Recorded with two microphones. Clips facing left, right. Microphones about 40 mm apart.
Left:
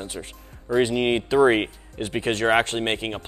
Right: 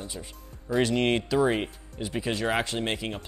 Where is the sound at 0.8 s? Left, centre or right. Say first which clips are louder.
Left 3 dB; centre.